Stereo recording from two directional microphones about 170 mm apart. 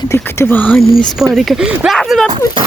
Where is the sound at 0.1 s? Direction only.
15° left (ahead or behind).